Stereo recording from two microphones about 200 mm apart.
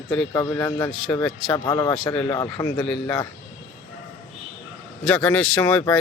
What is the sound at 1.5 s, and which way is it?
Speech, 15° left (ahead or behind).